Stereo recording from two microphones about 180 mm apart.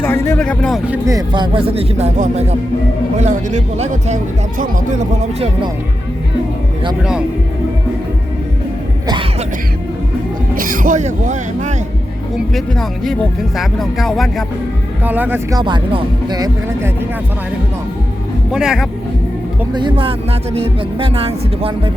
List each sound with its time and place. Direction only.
0.0 s speech: 10° left (ahead or behind)
0.9 s speech: 20° right (ahead or behind); by 5.5 s 40° right (ahead or behind)
10.5 s speech: 50° right (ahead or behind)
12.5 s speech: centre (ahead or behind)
15.0 s speech: 10° right (ahead or behind)
18.5 s speech: 5° right (ahead or behind)
19.7 s speech: 25° right (ahead or behind)